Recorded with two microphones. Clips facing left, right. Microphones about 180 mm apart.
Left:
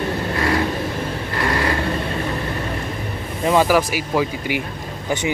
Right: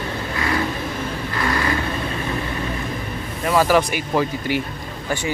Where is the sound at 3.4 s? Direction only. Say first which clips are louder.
Left 1 dB; 15° left (ahead or behind).